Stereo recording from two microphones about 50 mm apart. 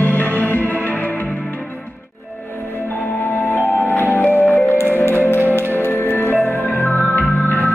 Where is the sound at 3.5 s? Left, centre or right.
Left.